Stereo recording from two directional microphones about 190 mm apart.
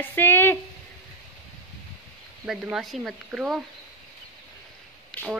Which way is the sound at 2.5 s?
Centre (ahead or behind).